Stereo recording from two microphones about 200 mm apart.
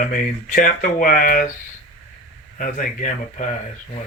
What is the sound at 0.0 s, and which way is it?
Speech, 45° left (ahead or behind).